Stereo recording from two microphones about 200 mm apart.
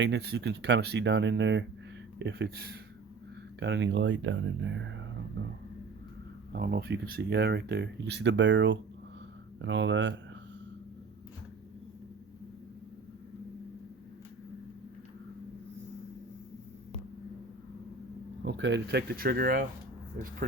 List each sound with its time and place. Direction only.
0.0 s speech: 55° right (ahead or behind)
6.5 s speech: 50° right (ahead or behind)
18.4 s speech: 60° right (ahead or behind)